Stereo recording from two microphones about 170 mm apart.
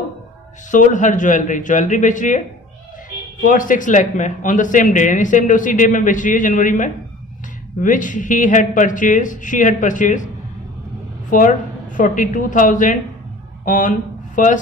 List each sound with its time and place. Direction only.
0.7 s speech: 50° left (ahead or behind)
3.4 s speech: 50° left (ahead or behind)
11.2 s speech: 50° left (ahead or behind)